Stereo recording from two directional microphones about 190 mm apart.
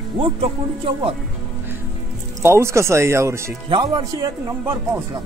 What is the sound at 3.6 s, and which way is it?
Speech, 25° right (ahead or behind).